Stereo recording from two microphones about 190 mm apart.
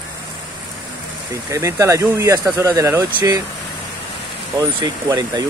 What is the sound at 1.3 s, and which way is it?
Speech, 15° right (ahead or behind).